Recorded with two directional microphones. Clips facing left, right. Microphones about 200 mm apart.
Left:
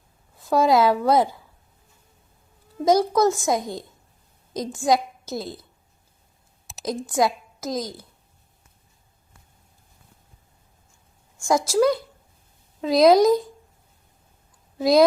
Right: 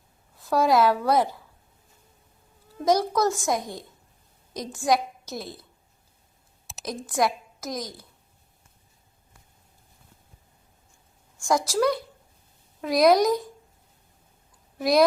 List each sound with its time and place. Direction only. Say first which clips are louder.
0.3 s a child's voice: left 2 dB; 20° left (ahead or behind)
2.8 s a child's voice: left 4 dB; 20° left (ahead or behind)
6.8 s a woman's voice: left 3 dB; 25° left (ahead or behind)
11.3 s a child's voice: left 4 dB; 20° left (ahead or behind)
14.8 s a woman's voice: left 4 dB; 25° left (ahead or behind)